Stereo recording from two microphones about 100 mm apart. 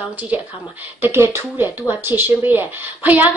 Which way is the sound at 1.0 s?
25° right (ahead or behind).